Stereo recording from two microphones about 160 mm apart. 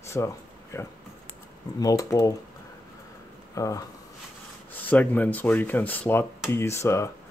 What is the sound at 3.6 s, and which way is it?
Speech, 20° left (ahead or behind).